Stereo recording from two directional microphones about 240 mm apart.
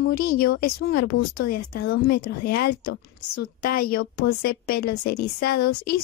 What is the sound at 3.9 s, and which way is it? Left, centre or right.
A woman's voice, left.